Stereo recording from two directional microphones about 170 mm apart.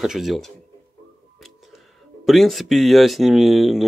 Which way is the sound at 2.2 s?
Centre (ahead or behind).